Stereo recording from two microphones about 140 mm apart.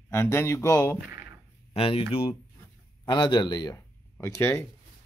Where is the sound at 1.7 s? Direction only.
40° left (ahead or behind); by 4.6 s 20° left (ahead or behind).